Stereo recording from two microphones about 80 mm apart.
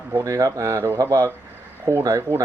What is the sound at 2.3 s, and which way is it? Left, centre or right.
Speech, left.